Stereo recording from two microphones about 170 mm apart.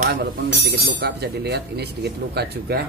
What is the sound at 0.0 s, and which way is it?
Speech, 65° right (ahead or behind).